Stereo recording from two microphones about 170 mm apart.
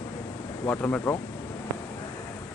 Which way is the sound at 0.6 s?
10° left (ahead or behind).